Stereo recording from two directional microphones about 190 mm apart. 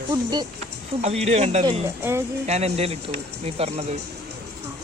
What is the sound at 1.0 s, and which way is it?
Speech, 35° right (ahead or behind).